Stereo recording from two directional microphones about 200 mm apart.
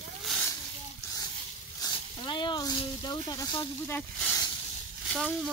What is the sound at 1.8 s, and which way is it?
Speech, 20° left (ahead or behind).